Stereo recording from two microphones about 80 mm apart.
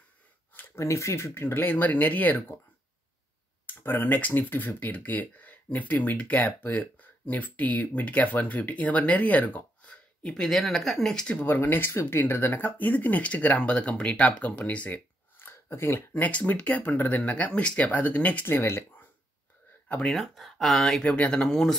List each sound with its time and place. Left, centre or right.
0.7 s speech: left
3.6 s speech: left; by 11.3 s centre
11.3 s speech: left
15.3 s speech: left
18.4 s speech: left
20.1 s speech: centre